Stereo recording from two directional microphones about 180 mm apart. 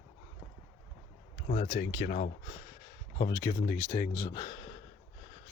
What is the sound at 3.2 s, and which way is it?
Speech, 20° left (ahead or behind).